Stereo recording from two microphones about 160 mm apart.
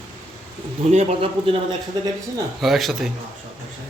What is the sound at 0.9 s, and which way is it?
Speech, 40° right (ahead or behind).